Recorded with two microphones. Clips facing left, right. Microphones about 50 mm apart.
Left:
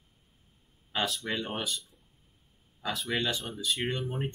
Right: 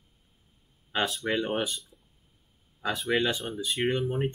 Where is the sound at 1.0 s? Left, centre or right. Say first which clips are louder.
Right 2 dB; centre.